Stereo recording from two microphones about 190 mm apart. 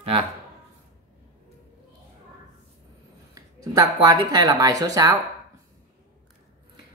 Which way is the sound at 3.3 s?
20° right (ahead or behind).